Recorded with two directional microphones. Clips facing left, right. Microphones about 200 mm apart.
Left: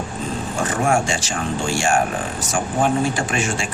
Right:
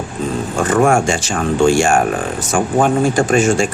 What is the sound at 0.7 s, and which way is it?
Speech, 55° right (ahead or behind).